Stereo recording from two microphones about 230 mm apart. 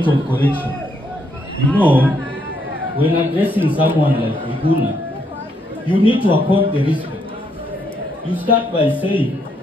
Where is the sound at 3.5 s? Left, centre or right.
Left.